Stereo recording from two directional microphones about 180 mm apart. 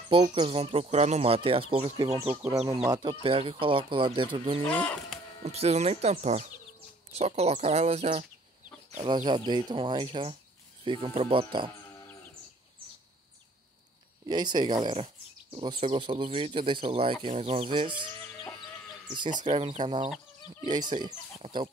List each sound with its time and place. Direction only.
0.1 s speech: 30° right (ahead or behind)
2.1 s speech: 10° right (ahead or behind)
2.7 s speech: 20° right (ahead or behind)
4.6 s speech: 5° left (ahead or behind)
5.4 s speech: 35° right (ahead or behind)
9.0 s speech: 25° right (ahead or behind)
14.2 s speech: 25° right (ahead or behind)
19.1 s speech: 25° right (ahead or behind)